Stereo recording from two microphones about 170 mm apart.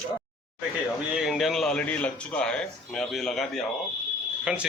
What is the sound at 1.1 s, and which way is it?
A man's voice, centre (ahead or behind).